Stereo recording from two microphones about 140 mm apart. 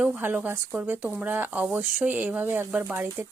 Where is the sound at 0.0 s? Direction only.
10° right (ahead or behind).